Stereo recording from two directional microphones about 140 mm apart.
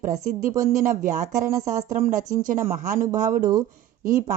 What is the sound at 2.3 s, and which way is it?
Speech, 70° right (ahead or behind).